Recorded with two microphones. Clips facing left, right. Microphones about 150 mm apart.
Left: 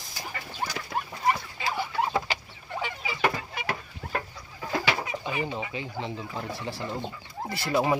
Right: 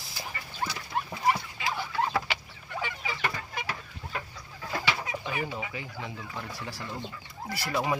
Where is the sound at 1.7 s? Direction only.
15° left (ahead or behind).